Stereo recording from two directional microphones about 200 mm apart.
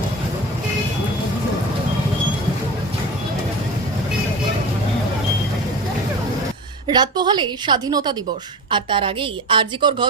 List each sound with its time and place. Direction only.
6.8 s a woman's voice: 20° right (ahead or behind)